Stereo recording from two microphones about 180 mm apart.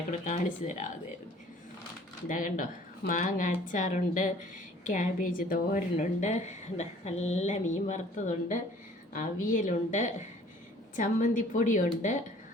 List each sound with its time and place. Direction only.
0.1 s speech: 45° left (ahead or behind)
2.2 s a woman's voice: 45° left (ahead or behind)